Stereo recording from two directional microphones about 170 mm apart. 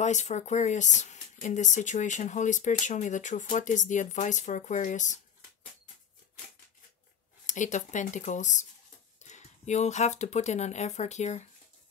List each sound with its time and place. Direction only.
0.0 s speech: 45° left (ahead or behind)
7.4 s speech: 45° left (ahead or behind)